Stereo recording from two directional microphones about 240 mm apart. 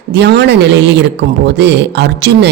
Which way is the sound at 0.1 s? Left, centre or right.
Right.